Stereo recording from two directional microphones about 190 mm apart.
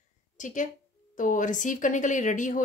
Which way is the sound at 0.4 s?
40° left (ahead or behind).